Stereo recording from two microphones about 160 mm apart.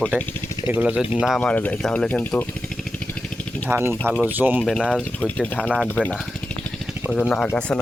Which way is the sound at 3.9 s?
5° left (ahead or behind).